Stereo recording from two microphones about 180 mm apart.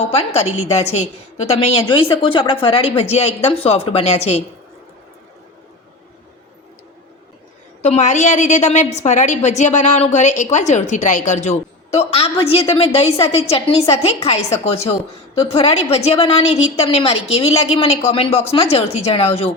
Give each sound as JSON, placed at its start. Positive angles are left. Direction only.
{"t": 0.3, "sound": "a woman's voice", "side_deg": 35}
{"t": 7.8, "sound": "a woman's voice", "side_deg": 40}